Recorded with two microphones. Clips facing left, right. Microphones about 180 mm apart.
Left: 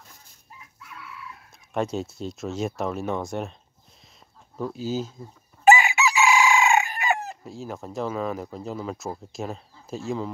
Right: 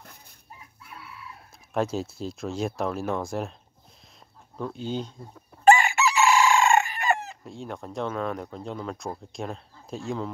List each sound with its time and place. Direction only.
0.6 s chicken: 30° right (ahead or behind)
1.7 s speech: centre (ahead or behind)
4.6 s speech: 5° left (ahead or behind)
5.7 s chicken: centre (ahead or behind)
7.0 s speech: centre (ahead or behind)